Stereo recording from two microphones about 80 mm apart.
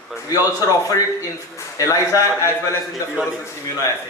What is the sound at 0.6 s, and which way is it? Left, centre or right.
A man's voice, left.